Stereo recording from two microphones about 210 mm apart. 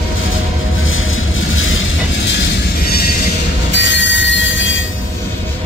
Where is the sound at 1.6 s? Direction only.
70° left (ahead or behind).